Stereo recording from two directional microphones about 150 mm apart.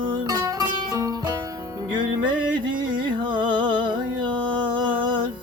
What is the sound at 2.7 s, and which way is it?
Music, 30° right (ahead or behind).